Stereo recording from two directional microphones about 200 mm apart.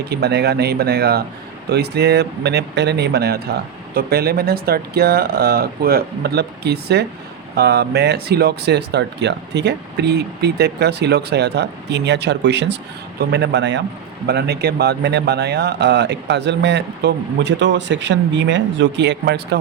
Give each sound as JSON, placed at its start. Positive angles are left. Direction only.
{"t": 0.1, "sound": "speech", "side_deg": -55}